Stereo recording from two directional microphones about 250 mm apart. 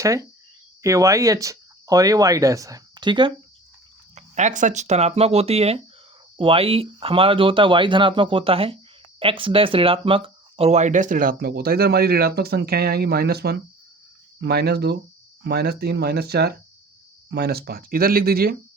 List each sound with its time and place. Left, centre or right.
0.0 s speech: centre
4.1 s speech: right